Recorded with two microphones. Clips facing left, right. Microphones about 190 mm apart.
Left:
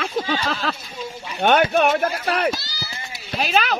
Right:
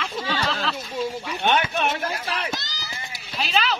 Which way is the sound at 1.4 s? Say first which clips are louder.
Left 7 dB; 55° left (ahead or behind).